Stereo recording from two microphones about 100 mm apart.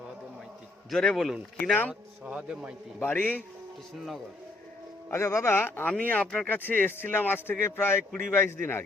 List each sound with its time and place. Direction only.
0.9 s speech: 5° left (ahead or behind)
1.6 s a man's voice: 15° left (ahead or behind)
1.9 s a man's voice: 10° right (ahead or behind)
3.0 s a man's voice: 20° left (ahead or behind)
3.9 s speech: centre (ahead or behind)
5.1 s a man's voice: 30° left (ahead or behind)